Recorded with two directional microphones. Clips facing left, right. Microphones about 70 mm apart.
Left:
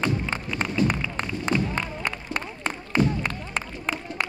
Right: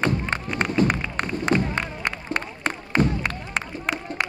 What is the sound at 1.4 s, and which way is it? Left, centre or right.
Music, right.